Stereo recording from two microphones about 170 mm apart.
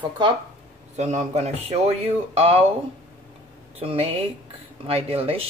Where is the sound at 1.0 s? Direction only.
45° right (ahead or behind).